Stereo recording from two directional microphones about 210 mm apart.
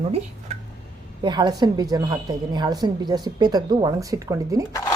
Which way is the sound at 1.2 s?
20° right (ahead or behind).